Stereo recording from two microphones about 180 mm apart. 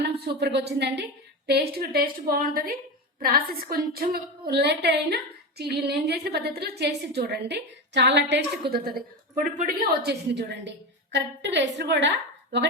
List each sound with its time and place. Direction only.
0.0 s a woman's voice: 65° right (ahead or behind)
8.7 s a woman's voice: 55° right (ahead or behind); by 12.6 s 80° right